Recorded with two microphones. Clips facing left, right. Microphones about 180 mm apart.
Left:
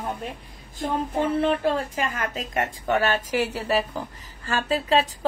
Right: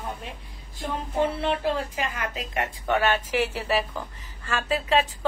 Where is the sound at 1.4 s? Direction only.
50° left (ahead or behind).